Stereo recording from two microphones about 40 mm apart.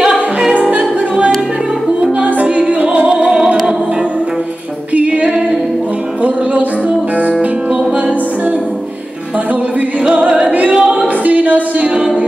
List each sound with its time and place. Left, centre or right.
0.6 s music: right
2.1 s music: right
2.4 s music: right
4.9 s female singing: right
10.0 s music: right
11.2 s a sound: right
11.9 s music: right